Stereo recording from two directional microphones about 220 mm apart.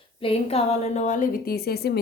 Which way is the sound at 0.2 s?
25° left (ahead or behind).